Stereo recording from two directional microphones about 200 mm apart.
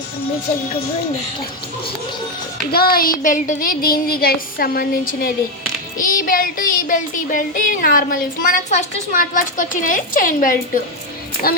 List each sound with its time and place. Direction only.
2.7 s child singing: 50° left (ahead or behind)